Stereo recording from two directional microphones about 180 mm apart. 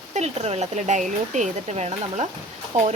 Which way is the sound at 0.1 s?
35° right (ahead or behind).